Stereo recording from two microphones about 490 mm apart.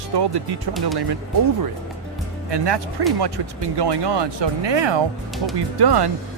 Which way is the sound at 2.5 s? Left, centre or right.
Right.